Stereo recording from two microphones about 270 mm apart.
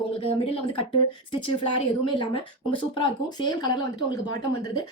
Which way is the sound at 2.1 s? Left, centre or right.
Centre.